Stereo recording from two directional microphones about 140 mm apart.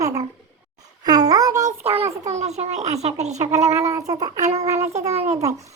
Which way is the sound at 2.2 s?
50° right (ahead or behind).